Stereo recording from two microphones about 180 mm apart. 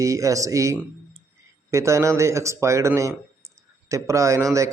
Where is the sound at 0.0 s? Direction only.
15° right (ahead or behind).